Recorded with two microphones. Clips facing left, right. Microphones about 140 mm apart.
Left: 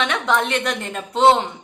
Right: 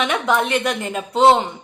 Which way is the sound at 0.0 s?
5° right (ahead or behind).